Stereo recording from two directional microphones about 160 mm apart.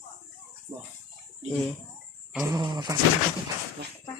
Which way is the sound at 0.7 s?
15° right (ahead or behind).